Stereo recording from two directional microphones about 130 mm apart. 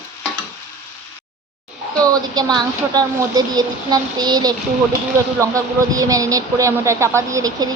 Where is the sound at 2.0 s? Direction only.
30° right (ahead or behind).